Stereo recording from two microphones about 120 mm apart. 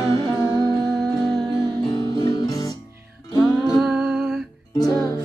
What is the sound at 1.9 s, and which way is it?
Music, 35° left (ahead or behind).